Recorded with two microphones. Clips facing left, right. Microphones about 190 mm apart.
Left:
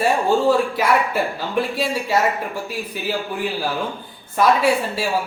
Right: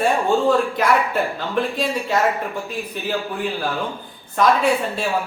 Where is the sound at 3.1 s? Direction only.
5° left (ahead or behind).